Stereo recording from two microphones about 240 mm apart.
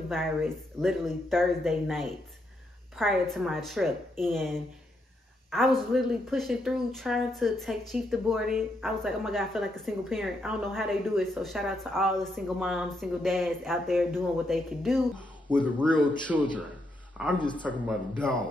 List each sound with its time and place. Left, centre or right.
0.1 s speech: centre
16.3 s speech: centre
17.4 s speech: centre
17.6 s speech: centre